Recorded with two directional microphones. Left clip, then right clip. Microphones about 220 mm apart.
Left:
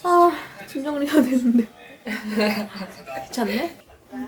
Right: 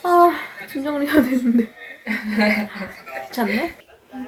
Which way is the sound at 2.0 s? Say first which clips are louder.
Right 3 dB; 50° left (ahead or behind).